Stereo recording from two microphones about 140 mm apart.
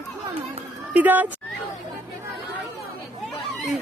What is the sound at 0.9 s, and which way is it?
Speech, 10° right (ahead or behind).